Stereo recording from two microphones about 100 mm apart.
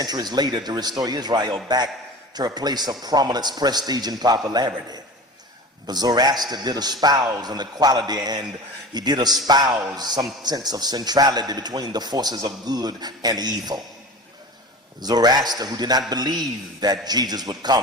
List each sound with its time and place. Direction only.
0.0 s a man's voice: 45° right (ahead or behind)
15.0 s a man's voice: 45° right (ahead or behind)